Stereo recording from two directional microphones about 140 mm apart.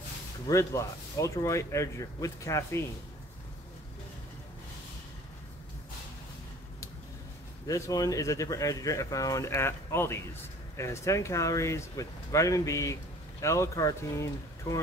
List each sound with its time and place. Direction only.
0.5 s speech: 20° left (ahead or behind)
7.6 s speech: 25° left (ahead or behind)